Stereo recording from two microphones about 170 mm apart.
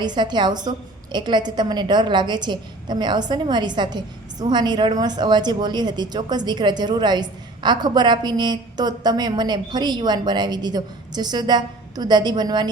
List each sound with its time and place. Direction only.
0.0 s a woman's voice: 25° right (ahead or behind)